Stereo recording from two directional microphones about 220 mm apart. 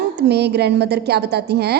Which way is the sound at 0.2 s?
50° right (ahead or behind).